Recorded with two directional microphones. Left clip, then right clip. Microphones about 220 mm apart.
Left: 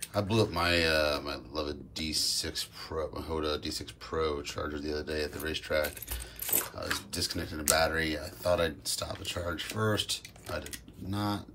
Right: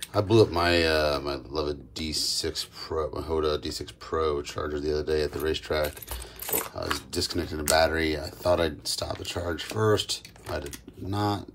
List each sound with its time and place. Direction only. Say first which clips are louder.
0.1 s speech: right 8 dB; 20° right (ahead or behind)